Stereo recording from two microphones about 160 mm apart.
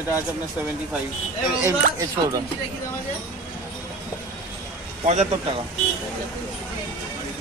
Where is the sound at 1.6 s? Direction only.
20° right (ahead or behind).